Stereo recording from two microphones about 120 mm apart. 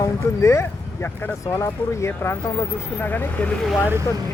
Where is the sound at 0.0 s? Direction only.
25° left (ahead or behind).